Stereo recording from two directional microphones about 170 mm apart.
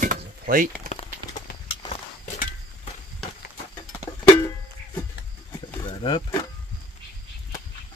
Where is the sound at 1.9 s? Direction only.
40° left (ahead or behind).